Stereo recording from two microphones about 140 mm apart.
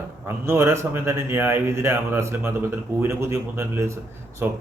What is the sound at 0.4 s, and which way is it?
Speech, 20° right (ahead or behind).